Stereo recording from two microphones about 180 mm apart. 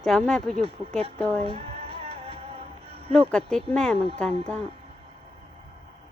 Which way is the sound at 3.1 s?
5° left (ahead or behind).